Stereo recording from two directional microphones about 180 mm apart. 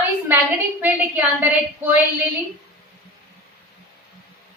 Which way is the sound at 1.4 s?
10° right (ahead or behind).